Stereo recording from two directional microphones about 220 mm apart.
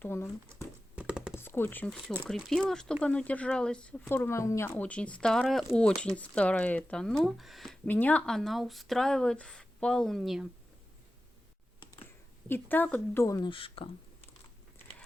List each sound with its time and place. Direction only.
0.0 s a woman's voice: 10° left (ahead or behind)
0.9 s computer keyboard: 5° right (ahead or behind)
1.3 s speech: 10° left (ahead or behind)
12.5 s a woman's voice: 10° left (ahead or behind); by 13.9 s 25° left (ahead or behind)